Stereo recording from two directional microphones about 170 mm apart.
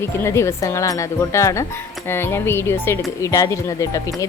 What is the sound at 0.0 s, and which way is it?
Speech, 15° left (ahead or behind).